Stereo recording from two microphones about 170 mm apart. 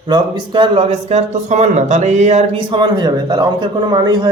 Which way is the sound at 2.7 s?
25° right (ahead or behind).